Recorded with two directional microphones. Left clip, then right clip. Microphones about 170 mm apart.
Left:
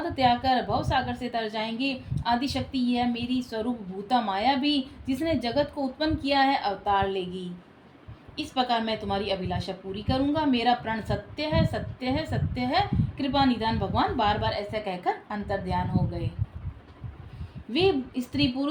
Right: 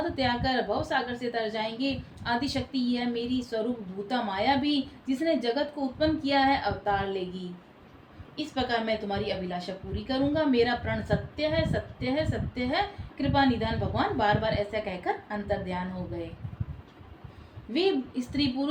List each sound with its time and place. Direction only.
0.2 s a woman's voice: 45° left (ahead or behind)
8.5 s a woman's voice: 45° left (ahead or behind)
17.7 s a woman's voice: 40° left (ahead or behind)